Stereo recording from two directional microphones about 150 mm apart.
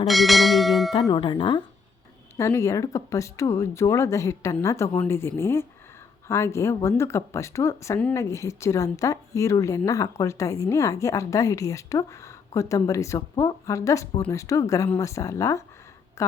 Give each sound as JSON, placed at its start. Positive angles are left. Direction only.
{"t": 0.1, "sound": "bell", "side_deg": 0}
{"t": 0.9, "sound": "speech", "side_deg": 30}
{"t": 2.4, "sound": "a woman's voice", "side_deg": 20}